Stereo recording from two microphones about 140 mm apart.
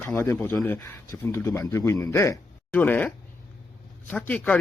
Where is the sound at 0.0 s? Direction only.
15° left (ahead or behind).